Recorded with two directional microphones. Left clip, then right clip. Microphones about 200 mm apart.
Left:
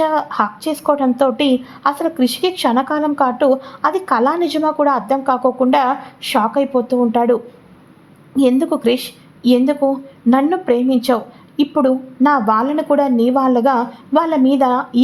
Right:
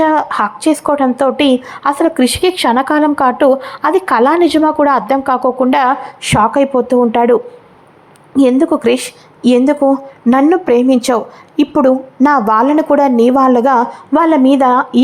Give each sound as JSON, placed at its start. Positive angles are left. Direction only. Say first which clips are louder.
{"t": 0.0, "sound": "a woman's voice", "louder": "right 4 dB", "side_deg": -15}